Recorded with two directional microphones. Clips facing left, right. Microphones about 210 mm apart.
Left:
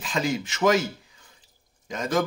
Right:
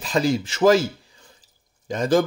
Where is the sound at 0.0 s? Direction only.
35° right (ahead or behind).